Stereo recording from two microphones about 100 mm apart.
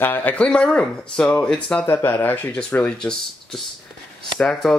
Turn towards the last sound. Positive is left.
turn(degrees=5)  # may be behind; listen again after turning